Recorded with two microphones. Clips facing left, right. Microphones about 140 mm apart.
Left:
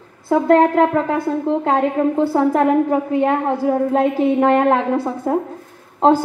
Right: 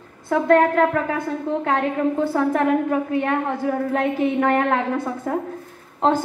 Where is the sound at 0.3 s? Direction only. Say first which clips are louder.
Left 3 dB; 25° left (ahead or behind).